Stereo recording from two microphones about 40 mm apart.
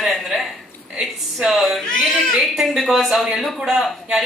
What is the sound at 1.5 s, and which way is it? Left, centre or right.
Speech, centre.